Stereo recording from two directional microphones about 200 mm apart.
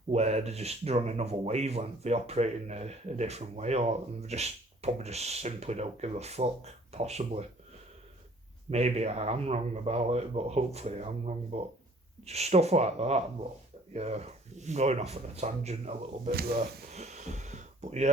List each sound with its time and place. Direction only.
0.1 s speech: 35° right (ahead or behind)
8.7 s speech: 30° right (ahead or behind)
16.3 s speech: 50° right (ahead or behind)
16.9 s a sound: 35° right (ahead or behind)